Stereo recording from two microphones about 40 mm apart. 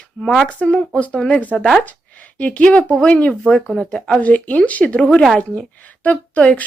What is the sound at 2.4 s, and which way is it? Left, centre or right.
Speech, left.